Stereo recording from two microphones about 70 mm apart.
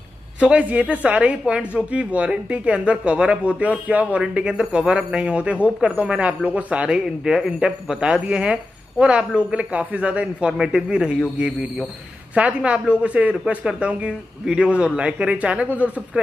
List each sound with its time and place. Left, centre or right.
0.4 s speech: centre
12.4 s speech: centre